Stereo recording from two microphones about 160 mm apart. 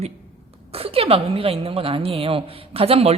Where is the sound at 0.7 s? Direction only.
35° right (ahead or behind).